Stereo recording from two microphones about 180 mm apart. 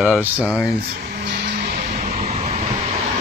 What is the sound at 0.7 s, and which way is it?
Vehicle, 60° right (ahead or behind).